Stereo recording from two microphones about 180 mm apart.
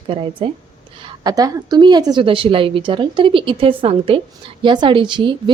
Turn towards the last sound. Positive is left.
turn(degrees=-25)  # may be behind; listen again after turning